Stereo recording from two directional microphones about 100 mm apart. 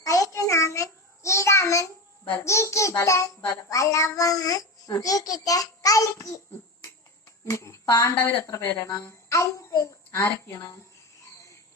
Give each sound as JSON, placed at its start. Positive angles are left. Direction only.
{"t": 0.0, "sound": "a sound", "side_deg": 35}
{"t": 2.4, "sound": "a child's voice", "side_deg": 30}
{"t": 7.5, "sound": "speech", "side_deg": 30}
{"t": 8.7, "sound": "a child's voice", "side_deg": 35}